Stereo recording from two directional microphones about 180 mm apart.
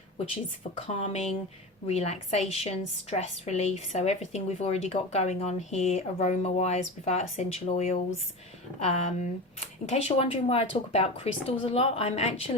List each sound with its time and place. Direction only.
0.8 s a woman's voice: 35° left (ahead or behind)